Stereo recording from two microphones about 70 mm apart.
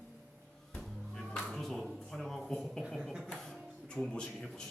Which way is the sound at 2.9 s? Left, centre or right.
Centre.